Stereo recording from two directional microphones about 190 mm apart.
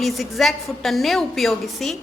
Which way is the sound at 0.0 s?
Centre (ahead or behind).